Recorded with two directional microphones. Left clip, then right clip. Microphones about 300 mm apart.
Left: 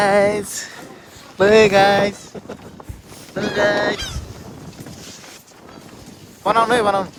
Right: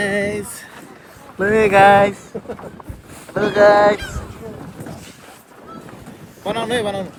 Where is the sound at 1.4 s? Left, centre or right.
Centre.